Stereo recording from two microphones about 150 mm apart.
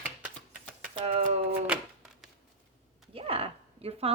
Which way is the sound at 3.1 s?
40° right (ahead or behind).